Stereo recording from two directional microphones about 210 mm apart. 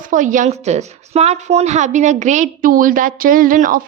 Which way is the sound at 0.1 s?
35° right (ahead or behind).